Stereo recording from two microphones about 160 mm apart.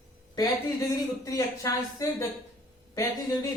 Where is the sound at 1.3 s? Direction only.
20° left (ahead or behind).